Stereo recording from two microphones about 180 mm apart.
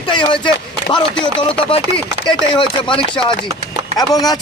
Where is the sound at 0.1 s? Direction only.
25° left (ahead or behind).